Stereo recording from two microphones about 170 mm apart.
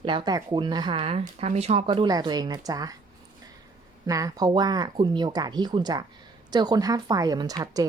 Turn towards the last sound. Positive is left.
turn(degrees=-25)  # may be behind; listen again after turning